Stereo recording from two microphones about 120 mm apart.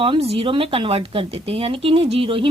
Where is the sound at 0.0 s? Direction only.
50° right (ahead or behind).